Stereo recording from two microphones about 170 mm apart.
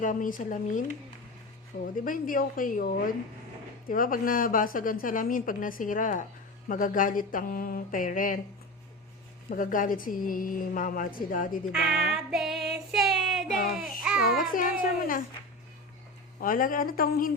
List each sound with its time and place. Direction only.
0.0 s a woman's voice: 50° left (ahead or behind)
9.5 s a woman's voice: 55° left (ahead or behind)
11.7 s speech: centre (ahead or behind)
12.1 s music: centre (ahead or behind)
12.9 s child singing: centre (ahead or behind)
13.7 s a sound: 5° right (ahead or behind)
14.2 s a child's voice: 55° left (ahead or behind)
16.4 s a child's voice: 55° left (ahead or behind)